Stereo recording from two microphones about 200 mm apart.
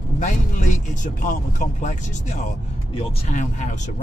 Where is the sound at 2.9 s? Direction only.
35° left (ahead or behind).